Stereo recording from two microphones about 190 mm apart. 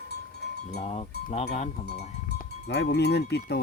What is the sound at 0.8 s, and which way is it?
Speech, 35° left (ahead or behind).